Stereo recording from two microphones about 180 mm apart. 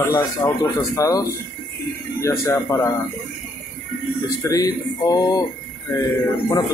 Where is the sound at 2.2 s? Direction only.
20° left (ahead or behind).